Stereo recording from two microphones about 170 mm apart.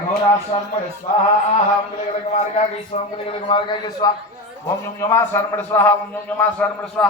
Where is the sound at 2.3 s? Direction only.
40° left (ahead or behind).